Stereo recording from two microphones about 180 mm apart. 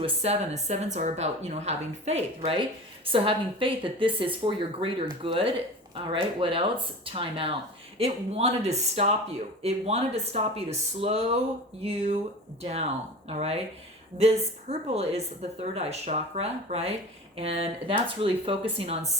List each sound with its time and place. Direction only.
0.0 s a woman's voice: 35° right (ahead or behind)